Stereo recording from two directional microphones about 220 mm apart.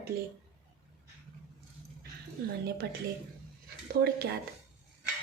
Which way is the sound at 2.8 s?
50° right (ahead or behind).